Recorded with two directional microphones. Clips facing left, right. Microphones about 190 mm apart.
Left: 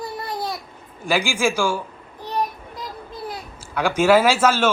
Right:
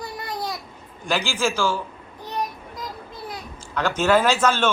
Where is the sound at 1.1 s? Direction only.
10° left (ahead or behind).